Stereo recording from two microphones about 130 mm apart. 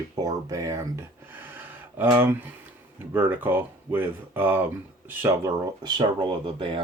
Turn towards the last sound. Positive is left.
turn(degrees=-40)  # may be behind; listen again after turning